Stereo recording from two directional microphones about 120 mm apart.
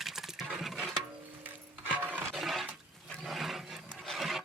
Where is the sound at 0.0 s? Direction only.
5° right (ahead or behind).